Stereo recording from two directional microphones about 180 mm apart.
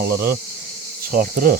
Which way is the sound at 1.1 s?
50° right (ahead or behind).